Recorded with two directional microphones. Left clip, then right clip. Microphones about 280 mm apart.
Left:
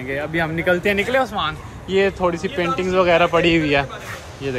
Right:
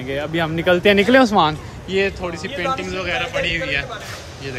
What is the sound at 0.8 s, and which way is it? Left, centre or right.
Speech, right.